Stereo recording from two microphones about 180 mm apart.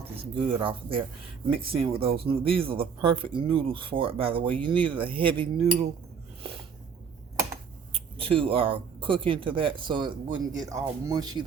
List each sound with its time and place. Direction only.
0.0 s speech: 30° right (ahead or behind)
8.2 s speech: 30° right (ahead or behind)